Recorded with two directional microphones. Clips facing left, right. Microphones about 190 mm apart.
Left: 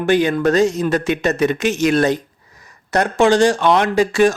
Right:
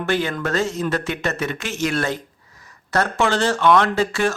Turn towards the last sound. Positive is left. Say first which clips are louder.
# left 6 dB
turn(degrees=15)  # may be behind; listen again after turning